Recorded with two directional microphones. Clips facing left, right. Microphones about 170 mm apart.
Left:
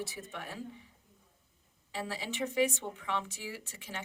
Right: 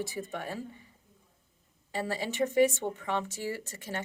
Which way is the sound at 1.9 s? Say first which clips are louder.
Right 5 dB; 45° right (ahead or behind).